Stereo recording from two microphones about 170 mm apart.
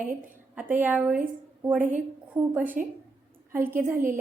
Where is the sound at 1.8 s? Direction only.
50° right (ahead or behind).